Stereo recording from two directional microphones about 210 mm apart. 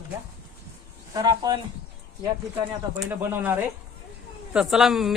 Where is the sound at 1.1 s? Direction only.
20° right (ahead or behind).